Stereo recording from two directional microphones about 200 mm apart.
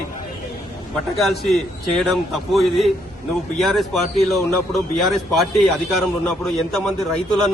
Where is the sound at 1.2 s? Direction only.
Centre (ahead or behind).